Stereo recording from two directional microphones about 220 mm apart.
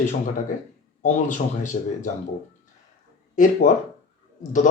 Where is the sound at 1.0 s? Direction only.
35° left (ahead or behind).